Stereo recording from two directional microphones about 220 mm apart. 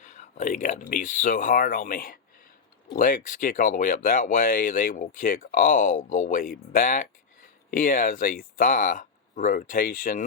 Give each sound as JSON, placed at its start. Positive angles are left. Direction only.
{"t": 0.0, "sound": "speech", "side_deg": 35}